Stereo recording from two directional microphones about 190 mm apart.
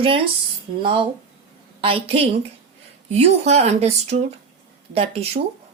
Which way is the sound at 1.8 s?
30° right (ahead or behind).